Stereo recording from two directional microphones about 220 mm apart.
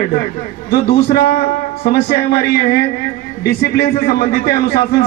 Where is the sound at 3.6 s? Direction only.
45° left (ahead or behind).